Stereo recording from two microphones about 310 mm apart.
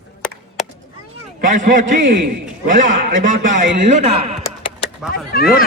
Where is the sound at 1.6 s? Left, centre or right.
Right.